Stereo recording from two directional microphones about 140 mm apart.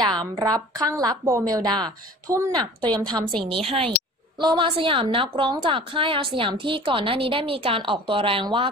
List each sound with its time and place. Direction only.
0.2 s a woman's voice: 30° right (ahead or behind)